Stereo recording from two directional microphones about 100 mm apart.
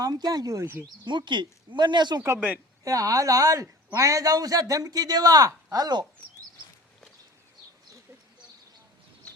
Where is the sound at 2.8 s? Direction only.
35° right (ahead or behind).